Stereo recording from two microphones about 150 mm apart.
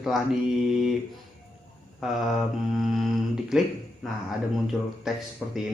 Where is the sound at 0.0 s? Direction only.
Centre (ahead or behind).